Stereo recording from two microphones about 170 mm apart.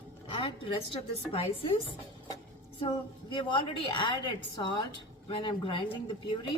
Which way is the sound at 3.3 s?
30° left (ahead or behind).